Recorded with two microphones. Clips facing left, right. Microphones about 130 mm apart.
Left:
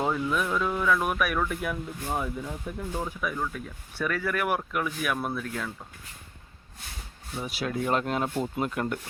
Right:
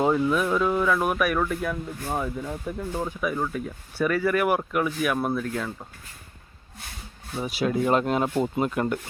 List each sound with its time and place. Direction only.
0.0 s a sound: 15° right (ahead or behind)
0.6 s speech: 10° right (ahead or behind)
7.3 s speech: centre (ahead or behind)